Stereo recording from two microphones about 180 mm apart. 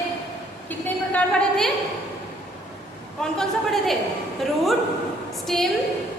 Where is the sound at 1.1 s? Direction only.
5° left (ahead or behind).